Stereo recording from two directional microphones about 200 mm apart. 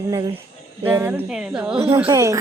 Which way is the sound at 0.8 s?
10° right (ahead or behind).